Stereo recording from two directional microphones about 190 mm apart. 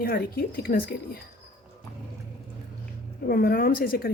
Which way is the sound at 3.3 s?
50° left (ahead or behind).